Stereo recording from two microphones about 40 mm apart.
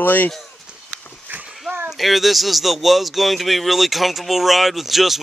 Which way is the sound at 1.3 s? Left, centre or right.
Right.